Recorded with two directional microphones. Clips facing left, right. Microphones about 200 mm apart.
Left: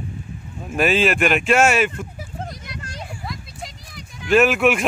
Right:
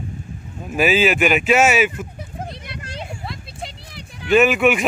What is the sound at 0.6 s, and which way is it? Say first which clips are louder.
Speech: right 1 dB; centre (ahead or behind).